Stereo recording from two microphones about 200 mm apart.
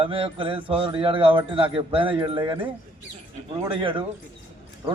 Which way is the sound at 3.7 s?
25° right (ahead or behind).